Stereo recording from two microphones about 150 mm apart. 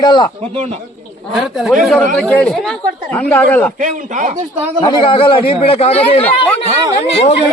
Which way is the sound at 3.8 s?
60° right (ahead or behind).